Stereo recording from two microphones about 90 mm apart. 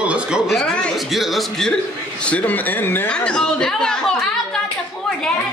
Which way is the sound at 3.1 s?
10° left (ahead or behind).